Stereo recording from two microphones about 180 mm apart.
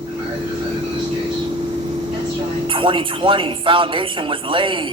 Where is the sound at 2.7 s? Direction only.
30° right (ahead or behind).